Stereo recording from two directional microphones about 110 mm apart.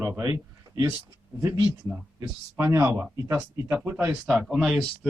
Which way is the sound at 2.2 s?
25° right (ahead or behind).